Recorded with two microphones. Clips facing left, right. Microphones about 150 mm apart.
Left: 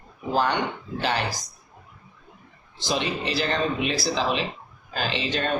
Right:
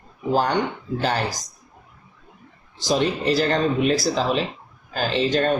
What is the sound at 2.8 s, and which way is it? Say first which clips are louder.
Speech: right 6 dB; 45° right (ahead or behind).